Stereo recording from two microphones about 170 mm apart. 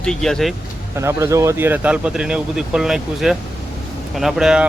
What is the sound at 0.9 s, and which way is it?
A man's voice, 15° right (ahead or behind).